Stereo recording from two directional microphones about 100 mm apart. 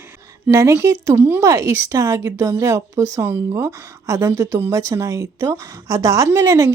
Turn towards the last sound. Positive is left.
turn(degrees=-30)  # may be behind; listen again after turning